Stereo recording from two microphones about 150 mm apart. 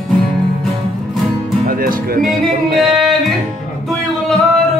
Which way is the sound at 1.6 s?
75° right (ahead or behind).